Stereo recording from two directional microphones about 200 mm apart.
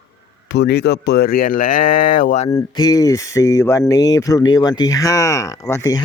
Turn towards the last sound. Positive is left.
turn(degrees=15)  # may be behind; listen again after turning